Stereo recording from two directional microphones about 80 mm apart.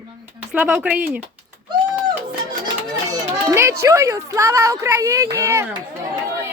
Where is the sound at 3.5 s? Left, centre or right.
Right.